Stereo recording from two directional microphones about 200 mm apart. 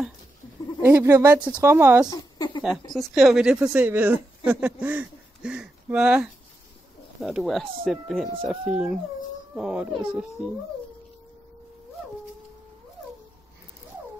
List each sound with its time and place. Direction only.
0.8 s speech: 10° right (ahead or behind)
2.0 s a sound: 20° left (ahead or behind)
2.9 s speech: centre (ahead or behind)